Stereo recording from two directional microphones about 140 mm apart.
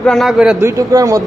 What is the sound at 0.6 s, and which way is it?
Speech, 20° right (ahead or behind).